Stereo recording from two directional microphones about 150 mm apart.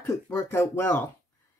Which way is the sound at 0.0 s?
20° left (ahead or behind).